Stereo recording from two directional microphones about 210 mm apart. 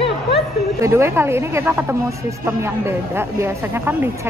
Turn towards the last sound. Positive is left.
turn(degrees=-10)  # may be behind; listen again after turning